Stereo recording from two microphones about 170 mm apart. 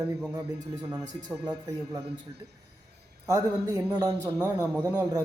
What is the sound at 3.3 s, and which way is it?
Speech, 20° right (ahead or behind).